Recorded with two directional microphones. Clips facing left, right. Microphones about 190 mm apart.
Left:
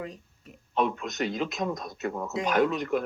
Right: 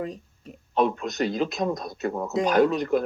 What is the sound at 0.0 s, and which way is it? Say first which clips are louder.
Speech: right 6 dB; 35° right (ahead or behind).